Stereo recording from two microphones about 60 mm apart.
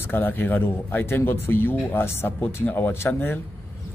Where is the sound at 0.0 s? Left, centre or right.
Left.